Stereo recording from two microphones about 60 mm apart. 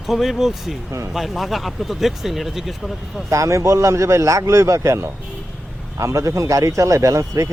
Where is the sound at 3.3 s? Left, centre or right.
Right.